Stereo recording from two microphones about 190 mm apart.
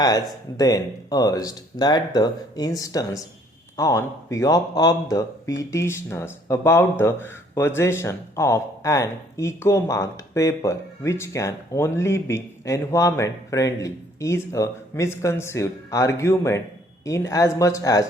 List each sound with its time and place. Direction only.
0.0 s speech: 20° left (ahead or behind)